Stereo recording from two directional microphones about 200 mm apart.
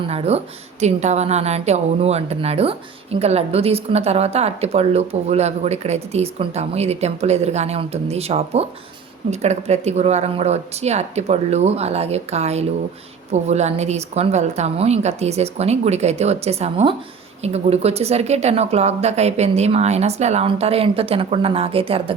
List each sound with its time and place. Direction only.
0.1 s a woman's voice: 30° right (ahead or behind)